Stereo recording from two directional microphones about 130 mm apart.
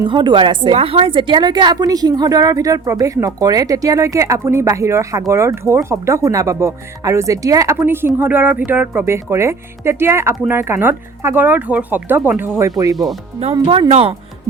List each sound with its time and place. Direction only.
0.0 s a woman's voice: 35° right (ahead or behind); by 12.5 s 15° right (ahead or behind)
12.5 s a woman's voice: 25° right (ahead or behind)
13.7 s speech: 50° right (ahead or behind)